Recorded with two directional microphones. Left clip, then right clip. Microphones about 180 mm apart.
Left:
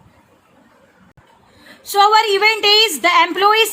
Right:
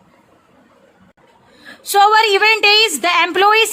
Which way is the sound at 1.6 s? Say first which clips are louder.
Right 1 dB; 35° right (ahead or behind).